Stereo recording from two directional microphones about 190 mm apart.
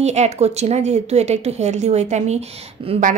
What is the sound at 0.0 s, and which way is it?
A woman's voice, 35° right (ahead or behind).